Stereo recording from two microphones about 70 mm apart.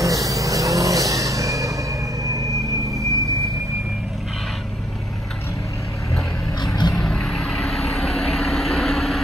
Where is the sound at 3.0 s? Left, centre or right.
Right.